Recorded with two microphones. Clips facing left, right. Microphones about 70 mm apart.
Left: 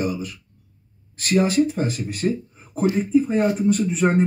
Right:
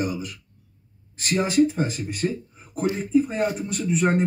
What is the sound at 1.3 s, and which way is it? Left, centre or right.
Speech, centre.